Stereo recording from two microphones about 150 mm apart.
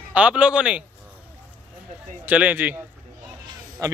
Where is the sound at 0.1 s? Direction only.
5° right (ahead or behind).